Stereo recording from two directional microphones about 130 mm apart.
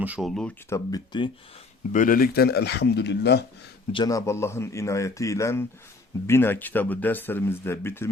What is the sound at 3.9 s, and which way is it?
Speech, 30° left (ahead or behind).